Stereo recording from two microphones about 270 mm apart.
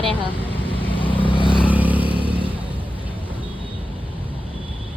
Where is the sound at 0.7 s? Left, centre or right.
Centre.